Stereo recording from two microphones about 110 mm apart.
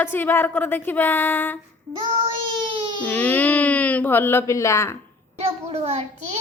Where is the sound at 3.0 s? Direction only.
15° left (ahead or behind).